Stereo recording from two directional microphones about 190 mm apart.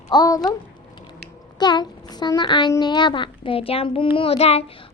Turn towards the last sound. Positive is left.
turn(degrees=30)  # may be behind; listen again after turning